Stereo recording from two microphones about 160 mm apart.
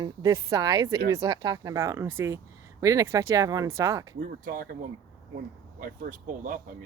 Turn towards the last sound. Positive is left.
turn(degrees=-55)  # may be behind; listen again after turning